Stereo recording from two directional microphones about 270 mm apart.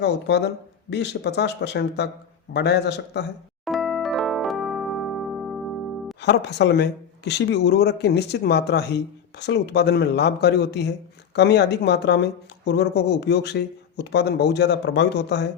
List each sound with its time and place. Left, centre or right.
0.0 s speech: left
3.7 s electric piano: centre
6.2 s speech: left